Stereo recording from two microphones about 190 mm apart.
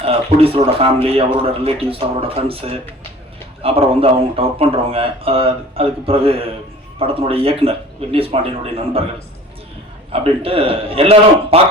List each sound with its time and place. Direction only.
0.0 s speech: 30° right (ahead or behind)
10.1 s speech: 30° right (ahead or behind)